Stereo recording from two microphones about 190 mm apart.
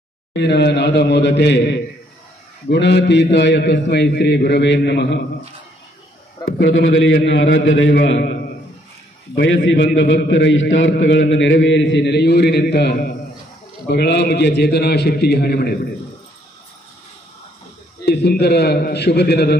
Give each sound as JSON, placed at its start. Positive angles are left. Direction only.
{"t": 0.3, "sound": "a man's voice", "side_deg": 65}
{"t": 6.6, "sound": "a man's voice", "side_deg": 85}
{"t": 18.0, "sound": "a man's voice", "side_deg": 60}